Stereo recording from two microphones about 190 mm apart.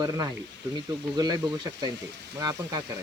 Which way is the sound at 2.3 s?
20° right (ahead or behind).